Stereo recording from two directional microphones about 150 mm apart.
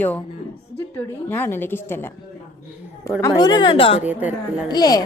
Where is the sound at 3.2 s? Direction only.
30° left (ahead or behind).